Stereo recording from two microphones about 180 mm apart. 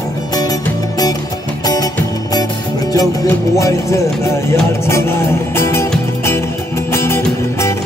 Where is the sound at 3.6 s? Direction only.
15° left (ahead or behind).